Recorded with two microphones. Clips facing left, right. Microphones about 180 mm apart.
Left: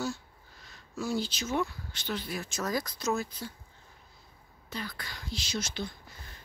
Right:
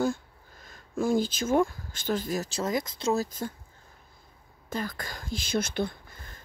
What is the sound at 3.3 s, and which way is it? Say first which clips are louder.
Speech: right 7 dB; 50° right (ahead or behind).